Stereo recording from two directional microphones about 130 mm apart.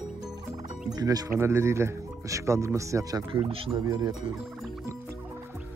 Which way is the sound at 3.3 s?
45° right (ahead or behind).